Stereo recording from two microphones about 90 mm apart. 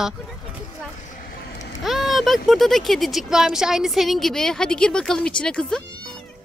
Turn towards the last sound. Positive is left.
turn(degrees=10)  # may be behind; listen again after turning